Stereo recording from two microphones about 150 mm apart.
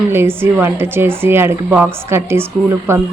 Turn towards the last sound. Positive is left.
turn(degrees=-15)  # may be behind; listen again after turning